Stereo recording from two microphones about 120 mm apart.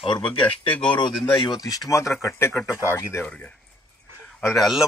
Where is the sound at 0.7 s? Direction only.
10° left (ahead or behind).